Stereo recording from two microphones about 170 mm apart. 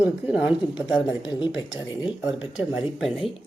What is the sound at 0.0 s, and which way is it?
Speech, 10° right (ahead or behind).